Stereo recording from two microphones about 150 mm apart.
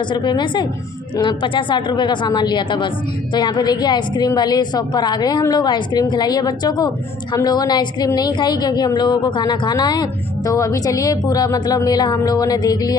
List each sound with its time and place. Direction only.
0.1 s a woman's voice: 30° left (ahead or behind)